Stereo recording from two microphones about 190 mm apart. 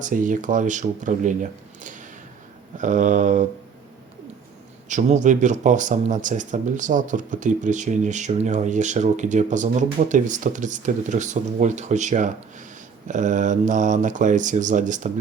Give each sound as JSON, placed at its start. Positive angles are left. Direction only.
{"t": 0.0, "sound": "speech", "side_deg": -45}
{"t": 4.9, "sound": "speech", "side_deg": -40}